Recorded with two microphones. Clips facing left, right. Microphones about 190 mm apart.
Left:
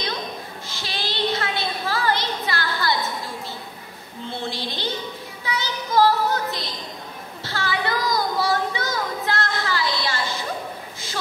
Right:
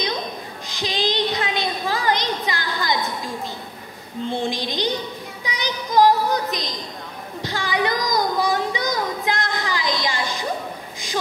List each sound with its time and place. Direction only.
0.7 s child singing: 15° right (ahead or behind)
4.3 s speech: 15° right (ahead or behind)
7.4 s child singing: 15° right (ahead or behind)